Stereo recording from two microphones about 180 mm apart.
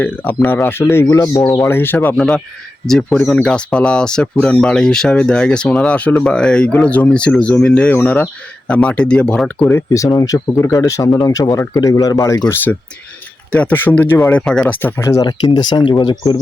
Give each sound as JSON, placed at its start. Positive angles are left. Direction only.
{"t": 0.0, "sound": "speech", "side_deg": 10}